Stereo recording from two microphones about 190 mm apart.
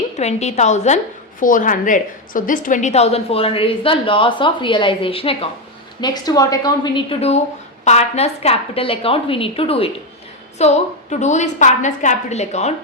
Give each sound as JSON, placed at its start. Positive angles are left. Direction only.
{"t": 0.2, "sound": "a woman's voice", "side_deg": 35}